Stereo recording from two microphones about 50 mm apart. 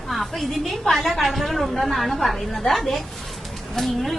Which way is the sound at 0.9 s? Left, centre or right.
Centre.